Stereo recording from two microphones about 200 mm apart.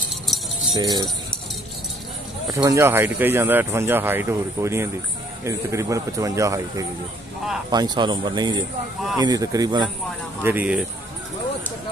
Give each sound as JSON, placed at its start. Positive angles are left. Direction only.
{"t": 0.3, "sound": "jingle bell", "side_deg": 0}
{"t": 0.7, "sound": "speech", "side_deg": -20}
{"t": 2.4, "sound": "speech", "side_deg": -15}
{"t": 10.4, "sound": "speech", "side_deg": -10}